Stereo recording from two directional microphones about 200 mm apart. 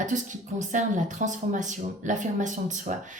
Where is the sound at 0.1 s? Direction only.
40° right (ahead or behind).